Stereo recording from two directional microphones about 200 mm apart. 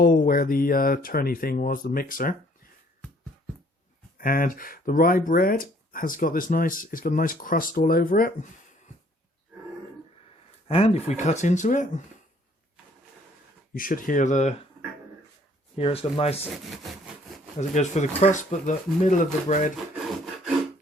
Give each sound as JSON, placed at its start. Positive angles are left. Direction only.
{"t": 0.0, "sound": "speech", "side_deg": 45}
{"t": 4.2, "sound": "speech", "side_deg": 45}
{"t": 10.7, "sound": "speech", "side_deg": 30}
{"t": 13.7, "sound": "speech", "side_deg": 45}
{"t": 15.7, "sound": "speech", "side_deg": 30}
{"t": 16.4, "sound": "speech", "side_deg": 0}
{"t": 17.6, "sound": "speech", "side_deg": 35}